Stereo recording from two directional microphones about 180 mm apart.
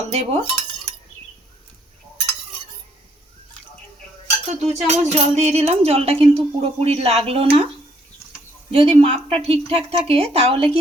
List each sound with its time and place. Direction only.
0.1 s speech: 35° right (ahead or behind)
4.4 s speech: 40° right (ahead or behind)
8.7 s speech: 30° right (ahead or behind)